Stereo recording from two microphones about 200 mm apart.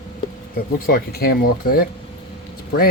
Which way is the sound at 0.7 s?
45° left (ahead or behind).